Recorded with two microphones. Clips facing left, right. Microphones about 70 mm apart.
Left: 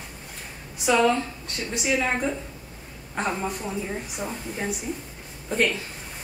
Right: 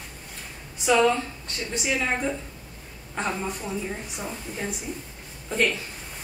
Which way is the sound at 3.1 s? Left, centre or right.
Centre.